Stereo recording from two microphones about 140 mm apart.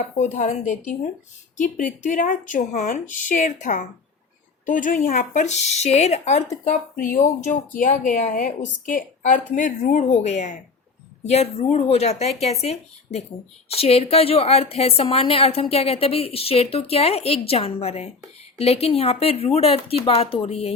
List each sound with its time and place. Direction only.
0.2 s speech: 60° left (ahead or behind)
7.0 s a woman's voice: 65° left (ahead or behind); by 20.7 s 45° left (ahead or behind)